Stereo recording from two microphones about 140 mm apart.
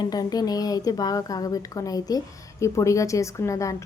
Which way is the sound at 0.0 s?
25° left (ahead or behind).